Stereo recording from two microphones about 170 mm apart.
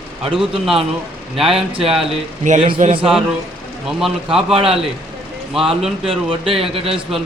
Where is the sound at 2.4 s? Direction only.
45° right (ahead or behind).